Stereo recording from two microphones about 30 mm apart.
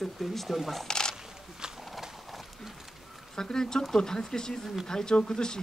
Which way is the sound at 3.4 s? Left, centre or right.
Left.